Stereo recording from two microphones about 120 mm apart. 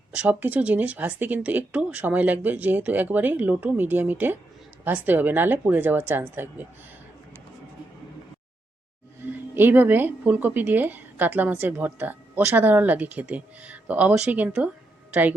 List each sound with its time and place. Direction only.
0.1 s speech: 10° right (ahead or behind)
9.2 s speech: 15° right (ahead or behind)